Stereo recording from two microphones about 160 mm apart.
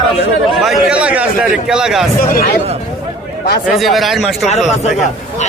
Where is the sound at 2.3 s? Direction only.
70° left (ahead or behind).